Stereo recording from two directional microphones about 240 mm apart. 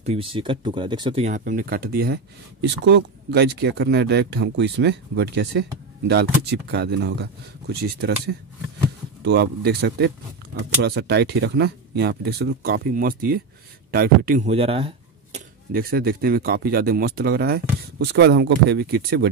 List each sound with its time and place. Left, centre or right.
0.0 s speech: right
1.4 s speech: right
15.7 s speech: right